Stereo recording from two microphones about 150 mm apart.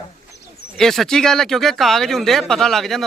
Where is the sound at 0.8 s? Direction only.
Centre (ahead or behind).